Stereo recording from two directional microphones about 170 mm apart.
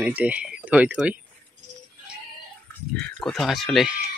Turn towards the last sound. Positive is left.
turn(degrees=0)  # may be behind; listen again after turning